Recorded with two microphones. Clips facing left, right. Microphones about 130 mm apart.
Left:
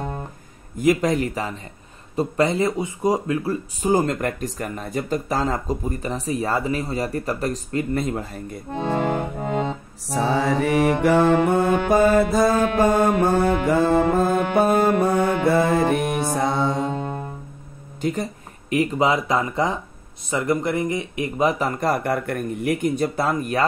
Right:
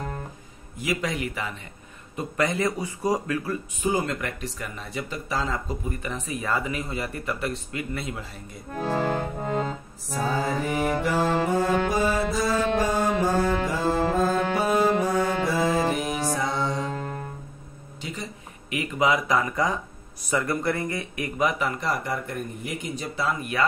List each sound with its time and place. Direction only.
0.7 s speech: 45° left (ahead or behind); by 3.5 s 25° left (ahead or behind)
3.8 s speech: 40° left (ahead or behind)
8.7 s accordion: 20° left (ahead or behind)
10.0 s mantra: 80° left; by 11.7 s 60° left (ahead or behind)
11.9 s music: 55° left (ahead or behind)
16.9 s music: 25° left (ahead or behind)
18.0 s speech: 50° left (ahead or behind)